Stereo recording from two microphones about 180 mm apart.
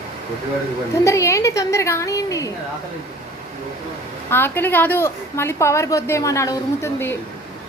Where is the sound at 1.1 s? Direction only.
15° left (ahead or behind).